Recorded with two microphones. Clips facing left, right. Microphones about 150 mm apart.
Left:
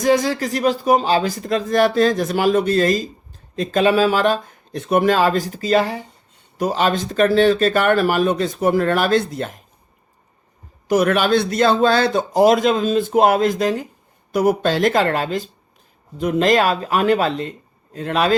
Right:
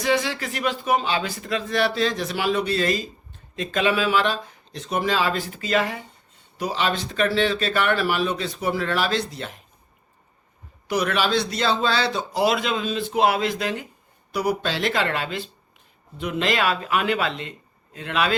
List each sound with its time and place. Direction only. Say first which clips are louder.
0.0 s speech: left 6 dB; 40° left (ahead or behind)
6.6 s speech: left 6 dB; 45° left (ahead or behind)
10.8 s speech: left 7 dB; 50° left (ahead or behind)